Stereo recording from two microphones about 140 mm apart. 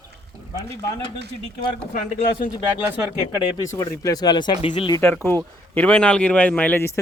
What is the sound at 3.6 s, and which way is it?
Speech, 25° left (ahead or behind).